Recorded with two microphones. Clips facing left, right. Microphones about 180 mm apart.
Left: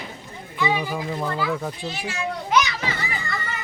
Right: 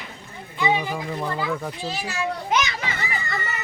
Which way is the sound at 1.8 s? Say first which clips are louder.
Right 1 dB; 35° right (ahead or behind).